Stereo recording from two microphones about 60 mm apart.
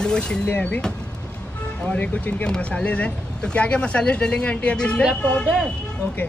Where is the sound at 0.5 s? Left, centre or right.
Left.